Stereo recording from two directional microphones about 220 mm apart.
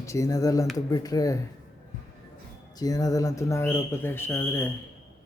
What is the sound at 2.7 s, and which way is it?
Speech, 15° left (ahead or behind).